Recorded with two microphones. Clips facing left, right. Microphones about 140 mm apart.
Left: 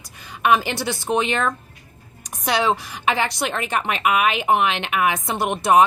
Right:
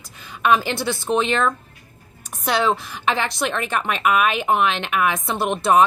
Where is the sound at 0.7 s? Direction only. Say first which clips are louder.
Right 2 dB; 55° right (ahead or behind).